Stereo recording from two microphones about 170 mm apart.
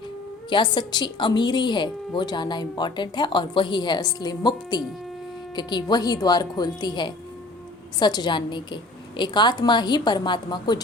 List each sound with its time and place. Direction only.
0.5 s a woman's voice: 25° left (ahead or behind)